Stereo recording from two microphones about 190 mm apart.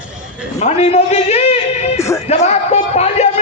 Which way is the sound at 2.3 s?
35° left (ahead or behind).